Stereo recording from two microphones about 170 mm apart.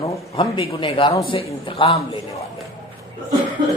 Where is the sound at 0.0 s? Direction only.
30° left (ahead or behind).